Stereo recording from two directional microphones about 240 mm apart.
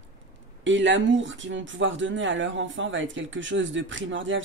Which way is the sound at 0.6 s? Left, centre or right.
Right.